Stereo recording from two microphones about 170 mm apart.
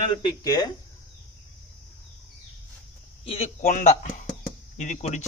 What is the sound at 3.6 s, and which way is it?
Speech, 50° left (ahead or behind).